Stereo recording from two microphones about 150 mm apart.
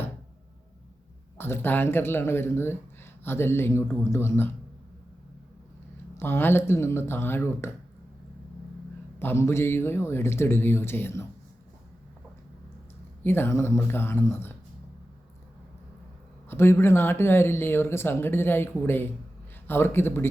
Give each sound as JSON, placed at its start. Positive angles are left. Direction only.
{"t": 1.4, "sound": "speech", "side_deg": 15}
{"t": 6.1, "sound": "speech", "side_deg": 15}
{"t": 9.1, "sound": "speech", "side_deg": 15}
{"t": 13.2, "sound": "speech", "side_deg": 15}
{"t": 16.5, "sound": "speech", "side_deg": 15}